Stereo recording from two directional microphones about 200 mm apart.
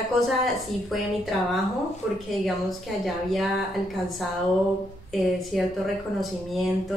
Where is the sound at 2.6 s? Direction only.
Centre (ahead or behind).